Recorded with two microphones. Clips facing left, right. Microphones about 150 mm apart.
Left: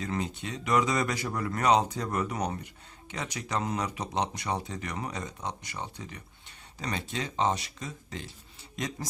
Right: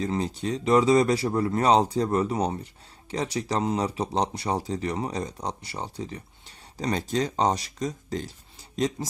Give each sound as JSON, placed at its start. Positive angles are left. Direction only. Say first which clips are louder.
{"t": 0.0, "sound": "speech", "louder": "right 6 dB", "side_deg": -30}